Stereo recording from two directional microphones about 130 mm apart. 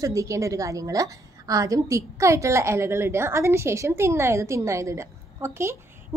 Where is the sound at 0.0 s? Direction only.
25° right (ahead or behind).